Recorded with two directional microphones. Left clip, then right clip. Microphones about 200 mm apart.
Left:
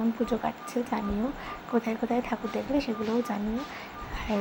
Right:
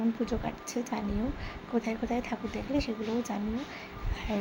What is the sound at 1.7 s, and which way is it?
A woman's voice, 5° left (ahead or behind).